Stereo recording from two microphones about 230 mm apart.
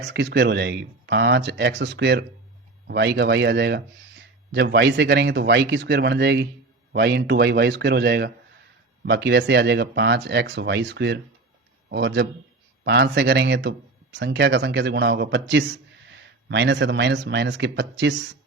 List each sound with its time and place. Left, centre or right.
0.0 s speech: right